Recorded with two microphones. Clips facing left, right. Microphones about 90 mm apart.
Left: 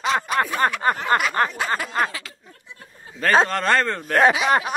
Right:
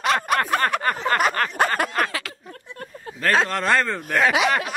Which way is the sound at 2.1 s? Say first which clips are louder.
Right 5 dB; 70° right (ahead or behind).